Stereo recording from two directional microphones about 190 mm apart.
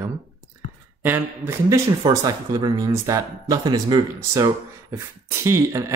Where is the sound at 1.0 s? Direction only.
10° right (ahead or behind).